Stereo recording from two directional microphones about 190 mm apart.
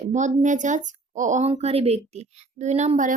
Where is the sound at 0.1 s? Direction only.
40° right (ahead or behind).